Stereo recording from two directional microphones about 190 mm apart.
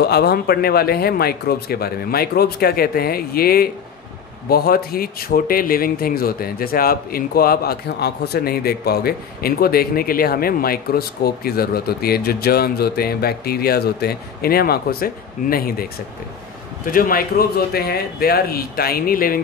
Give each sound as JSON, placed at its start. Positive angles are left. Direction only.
{"t": 0.0, "sound": "speech", "side_deg": 55}